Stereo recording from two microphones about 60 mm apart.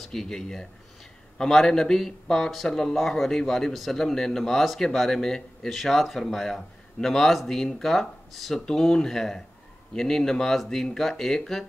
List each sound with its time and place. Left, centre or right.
0.0 s speech: centre